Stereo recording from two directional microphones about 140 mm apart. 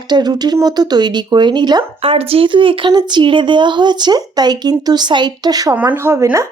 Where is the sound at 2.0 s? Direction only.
45° right (ahead or behind); by 5.7 s 25° right (ahead or behind).